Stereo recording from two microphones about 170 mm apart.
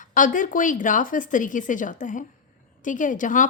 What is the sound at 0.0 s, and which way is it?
A woman's voice, 50° left (ahead or behind).